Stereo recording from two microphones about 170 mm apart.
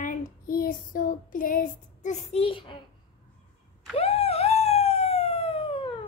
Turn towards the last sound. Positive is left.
turn(degrees=30)  # may be behind; listen again after turning